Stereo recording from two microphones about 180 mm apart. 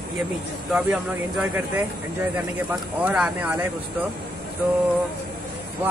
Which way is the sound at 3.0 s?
5° right (ahead or behind).